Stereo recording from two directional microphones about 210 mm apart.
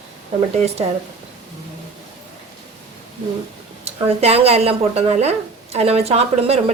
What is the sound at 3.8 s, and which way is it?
A woman's voice, 30° right (ahead or behind).